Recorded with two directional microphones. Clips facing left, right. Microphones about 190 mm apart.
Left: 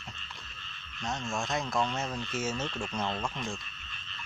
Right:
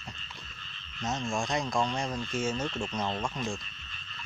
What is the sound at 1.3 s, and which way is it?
Speech, centre (ahead or behind).